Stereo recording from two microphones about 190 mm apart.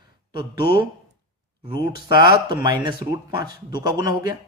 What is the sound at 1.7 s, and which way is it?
A man's voice, 25° right (ahead or behind).